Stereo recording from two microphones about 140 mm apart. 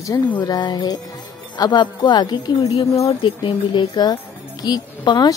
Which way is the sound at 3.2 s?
35° left (ahead or behind).